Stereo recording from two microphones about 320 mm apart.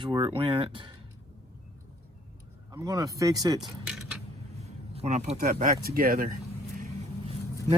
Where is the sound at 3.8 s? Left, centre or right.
Centre.